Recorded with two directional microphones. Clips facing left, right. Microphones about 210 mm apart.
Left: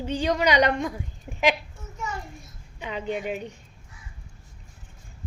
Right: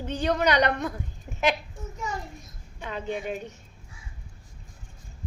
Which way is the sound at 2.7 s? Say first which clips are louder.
Left 2 dB; 10° left (ahead or behind).